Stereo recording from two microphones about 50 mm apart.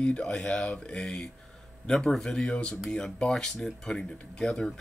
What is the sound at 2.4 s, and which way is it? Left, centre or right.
Speech, left.